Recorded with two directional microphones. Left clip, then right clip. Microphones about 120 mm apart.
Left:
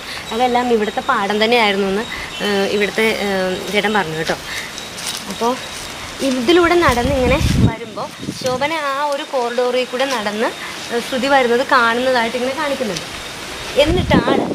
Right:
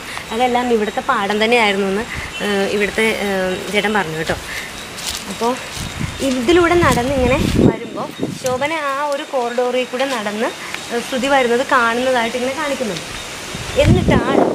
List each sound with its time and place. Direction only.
0.3 s speech: 5° left (ahead or behind)
5.4 s speech: 5° right (ahead or behind)
6.2 s speech: 5° left (ahead or behind)
8.5 s speech: 10° left (ahead or behind)
13.7 s speech: 10° left (ahead or behind)